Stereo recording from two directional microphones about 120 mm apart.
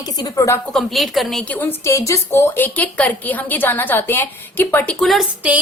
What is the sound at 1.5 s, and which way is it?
A woman's voice, 15° left (ahead or behind).